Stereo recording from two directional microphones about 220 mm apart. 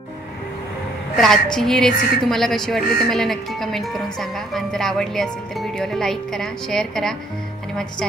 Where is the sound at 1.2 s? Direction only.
Centre (ahead or behind).